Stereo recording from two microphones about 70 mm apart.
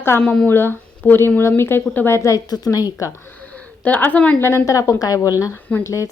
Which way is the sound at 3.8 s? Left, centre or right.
Left.